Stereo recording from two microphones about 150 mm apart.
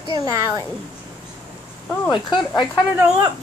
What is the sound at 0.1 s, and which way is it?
Speech, 25° right (ahead or behind).